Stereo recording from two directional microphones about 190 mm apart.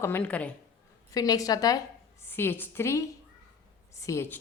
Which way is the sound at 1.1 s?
20° left (ahead or behind).